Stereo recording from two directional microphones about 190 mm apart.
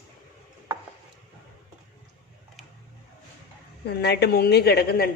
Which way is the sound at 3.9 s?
60° left (ahead or behind).